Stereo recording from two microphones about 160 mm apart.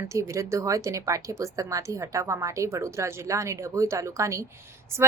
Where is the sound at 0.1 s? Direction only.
20° right (ahead or behind).